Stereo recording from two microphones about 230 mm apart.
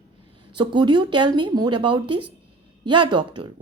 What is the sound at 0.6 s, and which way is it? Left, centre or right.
Speech, centre.